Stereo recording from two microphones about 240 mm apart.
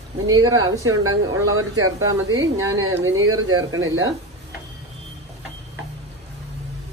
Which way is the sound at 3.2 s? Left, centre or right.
Right.